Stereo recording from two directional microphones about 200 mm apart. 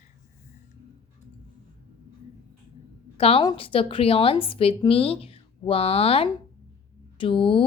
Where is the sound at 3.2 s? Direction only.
30° left (ahead or behind).